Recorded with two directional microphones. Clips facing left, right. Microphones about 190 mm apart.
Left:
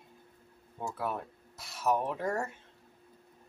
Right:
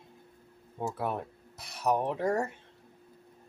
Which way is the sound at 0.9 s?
20° right (ahead or behind).